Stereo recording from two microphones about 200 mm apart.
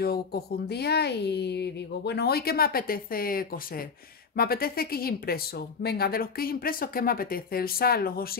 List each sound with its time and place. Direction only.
0.0 s speech: 50° left (ahead or behind)